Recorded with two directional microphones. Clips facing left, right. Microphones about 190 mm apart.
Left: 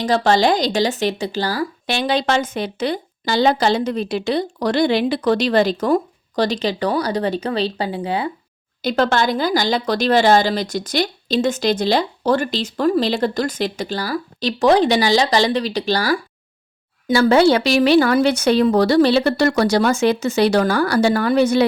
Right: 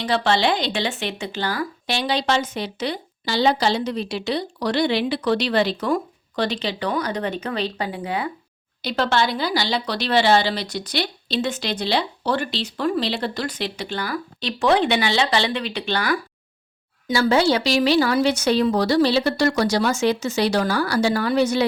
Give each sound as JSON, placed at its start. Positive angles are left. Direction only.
{"t": 0.0, "sound": "speech", "side_deg": 45}
{"t": 1.9, "sound": "speech", "side_deg": 50}
{"t": 8.8, "sound": "speech", "side_deg": 45}
{"t": 17.1, "sound": "a woman's voice", "side_deg": 55}